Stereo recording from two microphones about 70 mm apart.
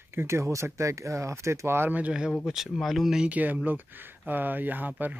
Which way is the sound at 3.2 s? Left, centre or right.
Right.